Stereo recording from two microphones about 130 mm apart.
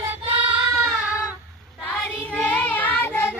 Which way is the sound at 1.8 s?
10° left (ahead or behind).